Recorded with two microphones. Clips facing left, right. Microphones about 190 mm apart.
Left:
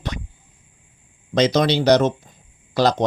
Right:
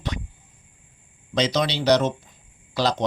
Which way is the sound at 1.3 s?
45° left (ahead or behind).